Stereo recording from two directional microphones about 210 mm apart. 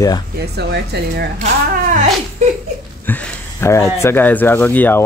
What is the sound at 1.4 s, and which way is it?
Speech, 35° right (ahead or behind).